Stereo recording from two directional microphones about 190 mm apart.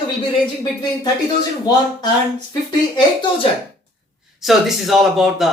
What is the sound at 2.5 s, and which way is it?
Speech, 25° left (ahead or behind).